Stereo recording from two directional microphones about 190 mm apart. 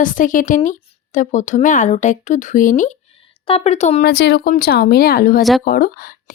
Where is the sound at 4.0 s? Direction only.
60° left (ahead or behind).